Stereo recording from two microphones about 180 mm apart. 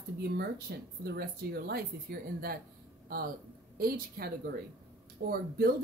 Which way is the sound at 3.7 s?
55° right (ahead or behind).